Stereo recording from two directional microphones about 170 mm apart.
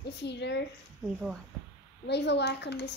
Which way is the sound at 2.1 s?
85° left.